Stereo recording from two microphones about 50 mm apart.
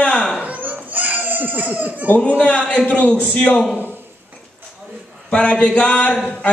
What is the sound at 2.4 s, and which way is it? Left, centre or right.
A man's voice, left.